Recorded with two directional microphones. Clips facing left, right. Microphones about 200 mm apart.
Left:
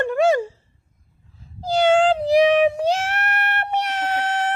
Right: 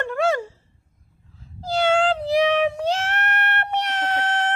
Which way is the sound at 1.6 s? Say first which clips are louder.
Left 3 dB; 15° left (ahead or behind).